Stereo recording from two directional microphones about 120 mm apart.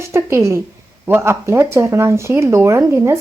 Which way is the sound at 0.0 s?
20° right (ahead or behind).